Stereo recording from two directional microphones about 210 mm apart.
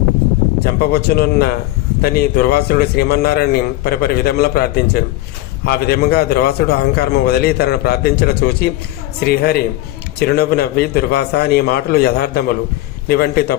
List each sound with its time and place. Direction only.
0.6 s a man's voice: 50° left (ahead or behind)